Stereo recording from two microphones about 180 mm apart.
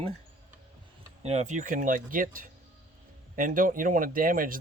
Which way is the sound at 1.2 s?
40° right (ahead or behind).